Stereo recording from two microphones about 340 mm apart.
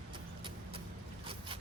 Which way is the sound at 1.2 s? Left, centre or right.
Centre.